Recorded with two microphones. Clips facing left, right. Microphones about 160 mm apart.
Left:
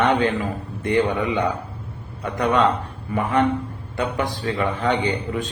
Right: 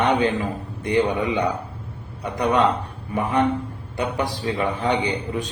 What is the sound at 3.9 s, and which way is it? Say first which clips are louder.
Speech: left 1 dB; 15° right (ahead or behind).